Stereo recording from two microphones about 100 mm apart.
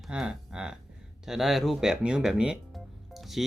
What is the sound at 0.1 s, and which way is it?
Speech, 10° right (ahead or behind).